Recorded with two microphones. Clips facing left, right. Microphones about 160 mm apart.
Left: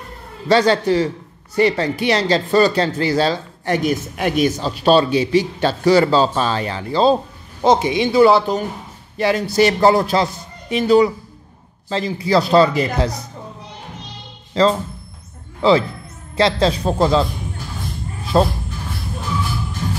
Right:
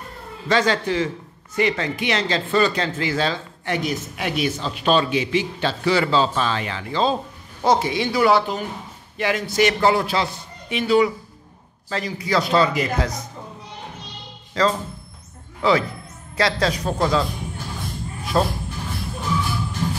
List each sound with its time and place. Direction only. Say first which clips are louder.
0.5 s speech: left 6 dB; 35° left (ahead or behind)
7.6 s speech: left 4 dB; 20° left (ahead or behind); by 11.1 s 40° left (ahead or behind)
11.9 s speech: left 5 dB; 30° left (ahead or behind)
14.5 s speech: left 5 dB; 30° left (ahead or behind)
18.3 s speech: left 5 dB; 30° left (ahead or behind)